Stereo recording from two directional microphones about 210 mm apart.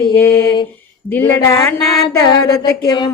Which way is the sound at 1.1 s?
10° left (ahead or behind).